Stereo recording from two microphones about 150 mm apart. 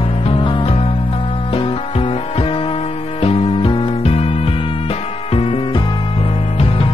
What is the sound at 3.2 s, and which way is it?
Music, 35° left (ahead or behind).